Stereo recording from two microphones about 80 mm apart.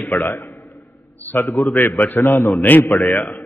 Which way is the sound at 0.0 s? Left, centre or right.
Left.